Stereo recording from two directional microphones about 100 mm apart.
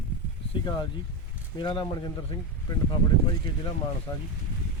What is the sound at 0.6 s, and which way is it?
Speech, 50° left (ahead or behind).